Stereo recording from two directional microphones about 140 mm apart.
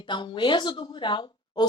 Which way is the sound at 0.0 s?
35° left (ahead or behind).